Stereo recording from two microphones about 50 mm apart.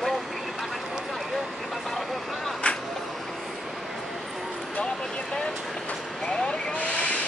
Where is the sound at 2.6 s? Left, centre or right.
Left.